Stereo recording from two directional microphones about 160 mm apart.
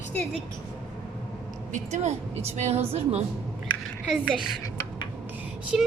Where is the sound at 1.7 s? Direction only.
45° right (ahead or behind).